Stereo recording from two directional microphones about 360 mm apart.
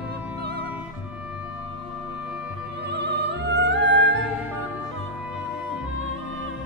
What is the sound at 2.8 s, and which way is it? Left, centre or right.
Opera, right.